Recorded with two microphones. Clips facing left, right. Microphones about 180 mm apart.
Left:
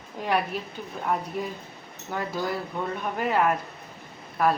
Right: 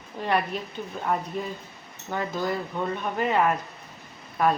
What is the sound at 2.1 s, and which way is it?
Speech, 5° left (ahead or behind).